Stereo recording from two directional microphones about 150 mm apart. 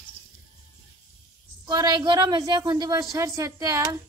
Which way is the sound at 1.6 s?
30° right (ahead or behind).